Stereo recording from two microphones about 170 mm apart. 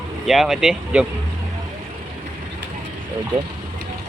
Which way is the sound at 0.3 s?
Centre (ahead or behind).